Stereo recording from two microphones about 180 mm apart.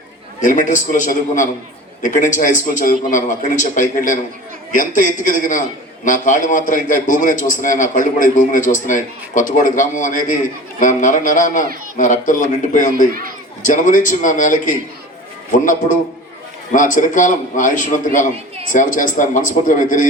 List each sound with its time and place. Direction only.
0.4 s a man's voice: 45° left (ahead or behind)